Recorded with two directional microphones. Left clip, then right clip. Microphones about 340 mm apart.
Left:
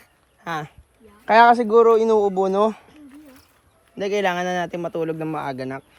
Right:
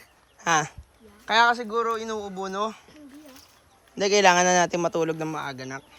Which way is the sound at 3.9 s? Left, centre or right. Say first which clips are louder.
Right 3 dB; centre.